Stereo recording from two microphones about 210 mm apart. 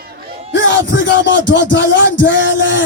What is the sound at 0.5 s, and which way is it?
Music, 60° left (ahead or behind).